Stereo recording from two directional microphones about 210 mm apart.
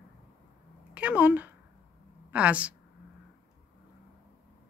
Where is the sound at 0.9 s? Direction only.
5° right (ahead or behind).